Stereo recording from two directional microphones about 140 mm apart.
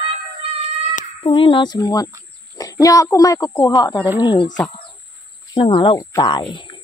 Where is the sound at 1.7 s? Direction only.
30° left (ahead or behind).